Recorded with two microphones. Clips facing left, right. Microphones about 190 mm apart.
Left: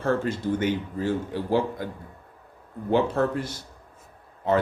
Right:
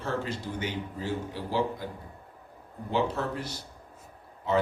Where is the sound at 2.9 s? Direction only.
50° left (ahead or behind).